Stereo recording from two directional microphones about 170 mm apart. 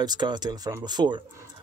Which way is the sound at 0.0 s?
25° right (ahead or behind).